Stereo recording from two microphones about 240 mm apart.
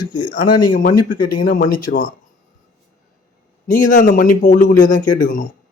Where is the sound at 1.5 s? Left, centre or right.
Left.